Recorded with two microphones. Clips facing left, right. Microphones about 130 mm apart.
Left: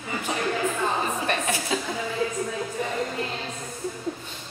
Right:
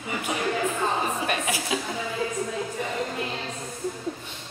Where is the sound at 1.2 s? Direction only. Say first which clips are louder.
Left 1 dB; 10° right (ahead or behind).